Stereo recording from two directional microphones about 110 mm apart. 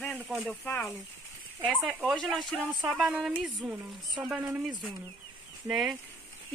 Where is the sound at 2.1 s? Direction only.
5° left (ahead or behind).